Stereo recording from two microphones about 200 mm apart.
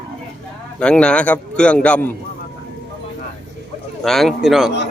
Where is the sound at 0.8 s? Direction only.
5° left (ahead or behind).